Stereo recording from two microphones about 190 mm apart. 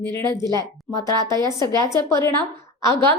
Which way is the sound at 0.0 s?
15° left (ahead or behind).